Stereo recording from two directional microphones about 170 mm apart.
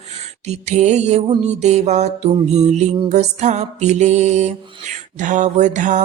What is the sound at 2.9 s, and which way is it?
Music, 40° right (ahead or behind).